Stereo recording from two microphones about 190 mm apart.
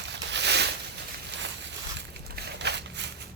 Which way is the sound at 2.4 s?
65° right (ahead or behind).